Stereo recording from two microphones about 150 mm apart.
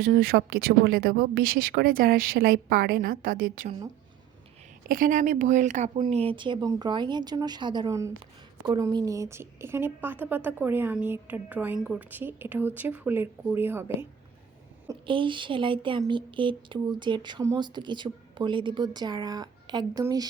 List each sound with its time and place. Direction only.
0.2 s speech: 80° right
4.9 s a woman's voice: 65° right (ahead or behind)
6.0 s a woman's voice: 40° right (ahead or behind); by 14.1 s 15° right (ahead or behind)
15.0 s speech: 35° right (ahead or behind)